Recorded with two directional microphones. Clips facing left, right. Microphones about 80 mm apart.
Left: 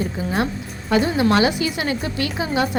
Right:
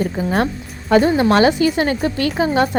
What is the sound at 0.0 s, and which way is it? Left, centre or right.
A woman's voice, right.